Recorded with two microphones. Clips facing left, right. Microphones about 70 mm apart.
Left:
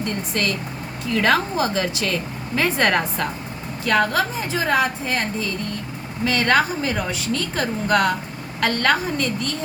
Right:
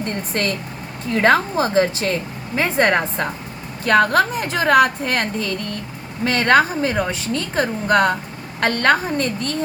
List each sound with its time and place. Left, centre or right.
0.0 s a woman's voice: right
2.6 s speech: right
3.8 s a woman's voice: right
6.2 s a woman's voice: right